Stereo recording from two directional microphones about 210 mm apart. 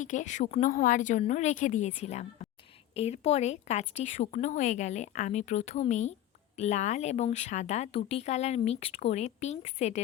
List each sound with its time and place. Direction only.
0.0 s speech: 35° left (ahead or behind)